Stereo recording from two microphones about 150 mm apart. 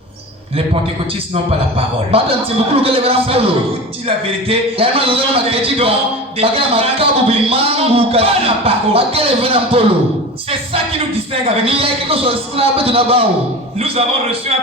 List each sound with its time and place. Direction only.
2.1 s speech: 40° right (ahead or behind)
11.4 s speech: 40° right (ahead or behind)